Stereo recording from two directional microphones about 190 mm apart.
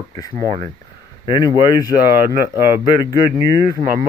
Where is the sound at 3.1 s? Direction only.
20° left (ahead or behind).